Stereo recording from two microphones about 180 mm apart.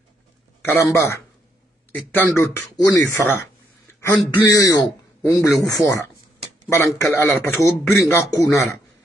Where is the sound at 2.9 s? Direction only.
10° left (ahead or behind).